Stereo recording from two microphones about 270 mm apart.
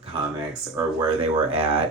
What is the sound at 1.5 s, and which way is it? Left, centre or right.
Speech, right.